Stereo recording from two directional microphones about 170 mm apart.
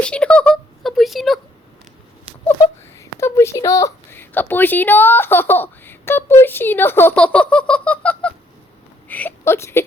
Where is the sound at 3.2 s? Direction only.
15° left (ahead or behind).